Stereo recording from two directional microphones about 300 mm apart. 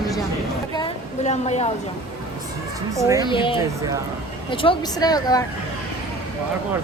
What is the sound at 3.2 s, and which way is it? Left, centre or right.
Speech, centre.